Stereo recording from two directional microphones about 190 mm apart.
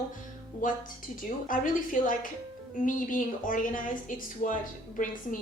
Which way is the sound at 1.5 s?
45° left (ahead or behind).